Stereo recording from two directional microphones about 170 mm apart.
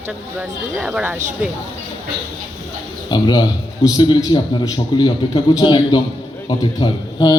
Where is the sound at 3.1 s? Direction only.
25° left (ahead or behind).